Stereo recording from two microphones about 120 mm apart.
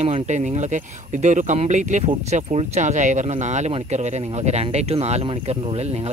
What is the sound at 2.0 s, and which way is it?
Speech, 55° right (ahead or behind).